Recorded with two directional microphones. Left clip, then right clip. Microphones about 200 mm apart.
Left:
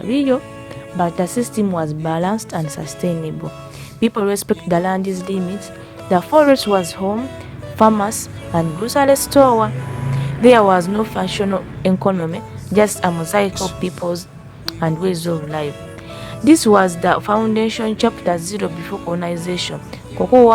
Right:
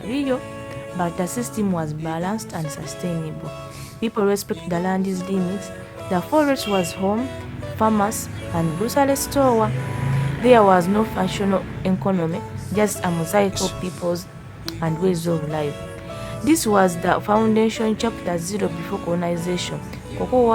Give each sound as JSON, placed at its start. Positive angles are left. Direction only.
{"t": 0.1, "sound": "a woman's voice", "side_deg": 25}
{"t": 13.5, "sound": "speech", "side_deg": 0}
{"t": 13.8, "sound": "a woman's voice", "side_deg": 25}
{"t": 16.4, "sound": "a woman's voice", "side_deg": 25}